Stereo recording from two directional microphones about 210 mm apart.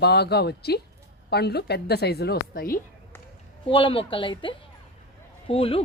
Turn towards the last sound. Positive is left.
turn(degrees=25)  # may be behind; listen again after turning